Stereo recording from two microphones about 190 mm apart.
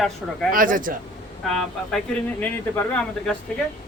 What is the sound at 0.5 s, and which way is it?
Speech, 45° right (ahead or behind).